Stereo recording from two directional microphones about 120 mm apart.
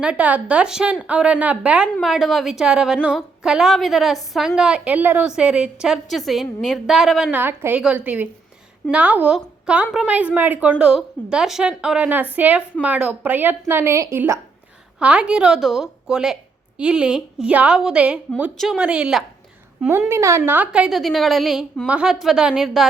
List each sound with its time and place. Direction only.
0.0 s a woman's voice: 10° right (ahead or behind)
2.0 s a woman's voice: centre (ahead or behind)
7.3 s a woman's voice: 15° right (ahead or behind)
14.9 s a woman's voice: 10° right (ahead or behind)
18.8 s a woman's voice: 10° right (ahead or behind)
20.1 s a woman's voice: 25° right (ahead or behind); by 22.9 s 5° right (ahead or behind)